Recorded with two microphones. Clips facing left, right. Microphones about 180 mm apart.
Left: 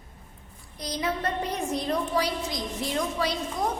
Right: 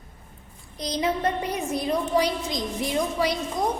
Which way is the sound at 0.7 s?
20° right (ahead or behind).